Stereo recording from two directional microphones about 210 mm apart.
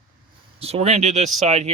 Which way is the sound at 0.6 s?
30° right (ahead or behind).